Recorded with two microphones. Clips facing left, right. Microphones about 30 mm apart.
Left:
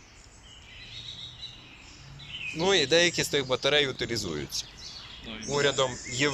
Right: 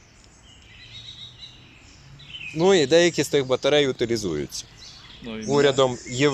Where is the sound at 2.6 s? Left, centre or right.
Centre.